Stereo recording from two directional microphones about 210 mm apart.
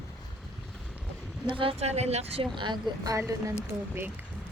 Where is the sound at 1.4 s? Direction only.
25° right (ahead or behind).